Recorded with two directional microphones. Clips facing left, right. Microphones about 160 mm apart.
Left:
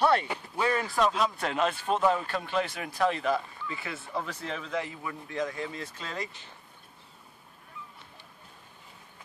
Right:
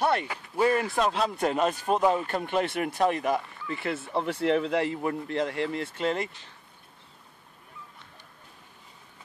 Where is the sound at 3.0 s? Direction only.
15° right (ahead or behind).